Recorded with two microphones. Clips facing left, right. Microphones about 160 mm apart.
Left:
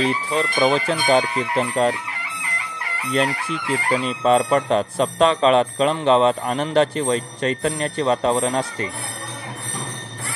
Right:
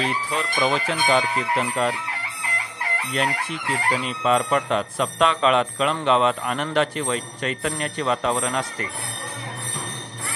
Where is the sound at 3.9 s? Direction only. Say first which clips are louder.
Left 6 dB; 35° left (ahead or behind).